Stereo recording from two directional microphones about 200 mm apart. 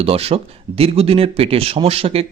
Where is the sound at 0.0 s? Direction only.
30° right (ahead or behind).